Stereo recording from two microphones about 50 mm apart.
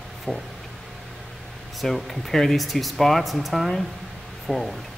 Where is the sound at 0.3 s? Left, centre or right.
Left.